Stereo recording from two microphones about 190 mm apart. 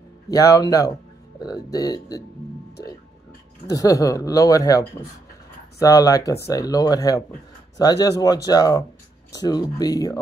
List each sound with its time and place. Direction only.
0.3 s speech: 15° left (ahead or behind)
3.6 s speech: 20° left (ahead or behind)